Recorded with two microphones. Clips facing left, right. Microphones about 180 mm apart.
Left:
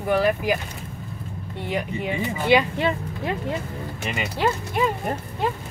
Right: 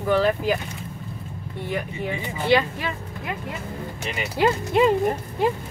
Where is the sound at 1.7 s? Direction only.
15° left (ahead or behind).